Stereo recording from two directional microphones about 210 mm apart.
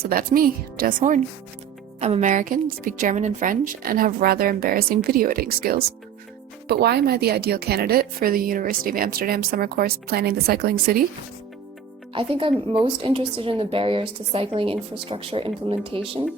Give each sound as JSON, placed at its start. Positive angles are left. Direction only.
{"t": 0.0, "sound": "speech", "side_deg": -45}
{"t": 12.1, "sound": "a woman's voice", "side_deg": -25}